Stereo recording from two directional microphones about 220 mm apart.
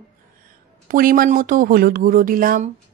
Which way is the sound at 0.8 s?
40° right (ahead or behind).